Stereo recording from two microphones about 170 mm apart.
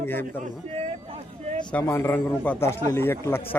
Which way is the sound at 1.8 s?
15° left (ahead or behind).